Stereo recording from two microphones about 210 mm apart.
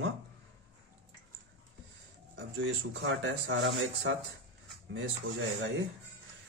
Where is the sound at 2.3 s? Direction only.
60° right (ahead or behind).